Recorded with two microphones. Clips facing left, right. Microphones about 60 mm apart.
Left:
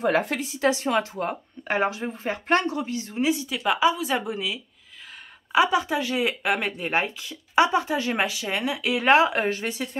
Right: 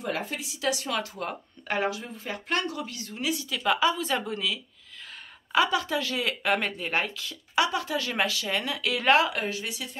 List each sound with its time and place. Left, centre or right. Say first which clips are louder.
0.4 s a woman's voice: left 6 dB; left
1.3 s speech: left 4 dB; centre
1.8 s a woman's voice: left 4 dB; left